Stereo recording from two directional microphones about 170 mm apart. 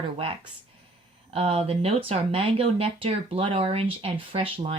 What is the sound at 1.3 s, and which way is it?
Speech, 35° right (ahead or behind).